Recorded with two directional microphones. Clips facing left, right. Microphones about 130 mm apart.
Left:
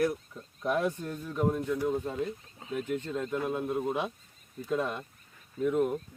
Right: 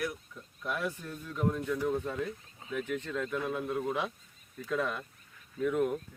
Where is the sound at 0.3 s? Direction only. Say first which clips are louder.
Left 7 dB; 25° left (ahead or behind).